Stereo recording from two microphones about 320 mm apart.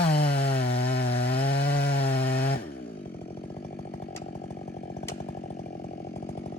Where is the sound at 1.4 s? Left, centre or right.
Left.